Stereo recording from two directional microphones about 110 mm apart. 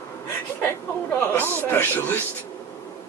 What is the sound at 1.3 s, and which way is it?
Speech, 20° left (ahead or behind).